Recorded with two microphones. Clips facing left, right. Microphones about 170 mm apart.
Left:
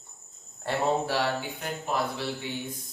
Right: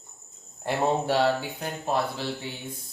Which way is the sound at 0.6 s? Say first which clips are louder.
Right 1 dB; 25° right (ahead or behind).